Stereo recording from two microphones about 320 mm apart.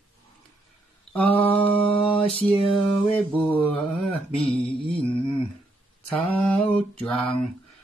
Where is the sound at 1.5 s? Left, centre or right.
Centre.